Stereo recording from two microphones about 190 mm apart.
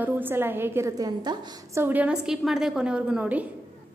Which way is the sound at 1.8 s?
10° right (ahead or behind).